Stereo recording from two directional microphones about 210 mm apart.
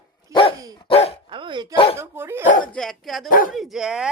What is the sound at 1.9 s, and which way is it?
Speech, 10° right (ahead or behind).